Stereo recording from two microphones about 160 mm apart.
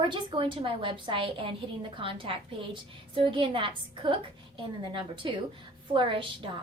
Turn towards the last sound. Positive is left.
turn(degrees=-35)  # may be behind; listen again after turning